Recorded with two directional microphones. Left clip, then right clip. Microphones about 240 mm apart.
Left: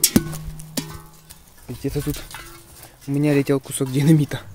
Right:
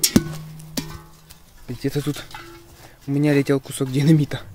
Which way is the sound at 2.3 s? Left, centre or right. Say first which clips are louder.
Even; left.